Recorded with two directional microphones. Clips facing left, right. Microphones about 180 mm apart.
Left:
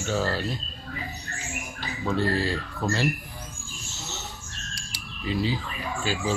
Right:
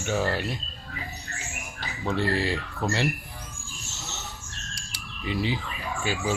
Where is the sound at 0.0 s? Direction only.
15° right (ahead or behind).